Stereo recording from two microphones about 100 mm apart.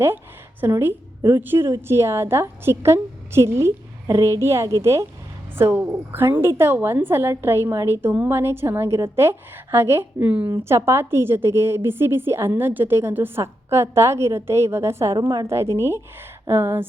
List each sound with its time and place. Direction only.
0.6 s a woman's voice: 20° right (ahead or behind)
10.5 s a woman's voice: 30° right (ahead or behind)